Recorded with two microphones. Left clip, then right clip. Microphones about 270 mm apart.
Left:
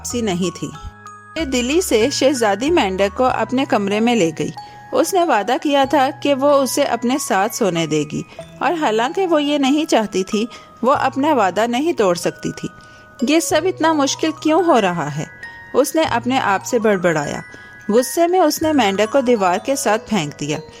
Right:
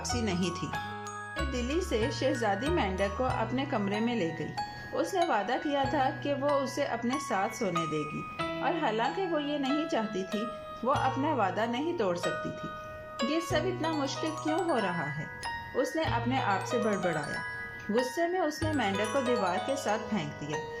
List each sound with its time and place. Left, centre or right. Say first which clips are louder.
0.0 s a woman's voice: left 11 dB; left
13.3 s a woman's voice: left 16 dB; left